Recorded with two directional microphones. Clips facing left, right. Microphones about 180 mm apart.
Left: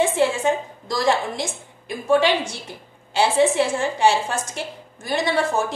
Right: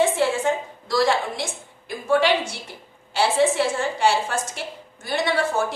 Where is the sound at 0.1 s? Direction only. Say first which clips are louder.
Left 2 dB; 20° left (ahead or behind).